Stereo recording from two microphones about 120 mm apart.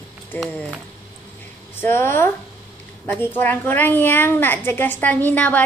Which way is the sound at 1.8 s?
20° left (ahead or behind).